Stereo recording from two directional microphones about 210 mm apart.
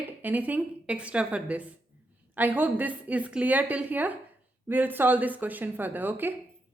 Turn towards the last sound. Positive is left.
turn(degrees=-10)  # may be behind; listen again after turning